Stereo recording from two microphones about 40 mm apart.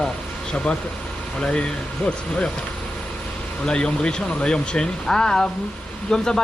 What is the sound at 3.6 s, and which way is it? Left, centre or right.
Speech, left.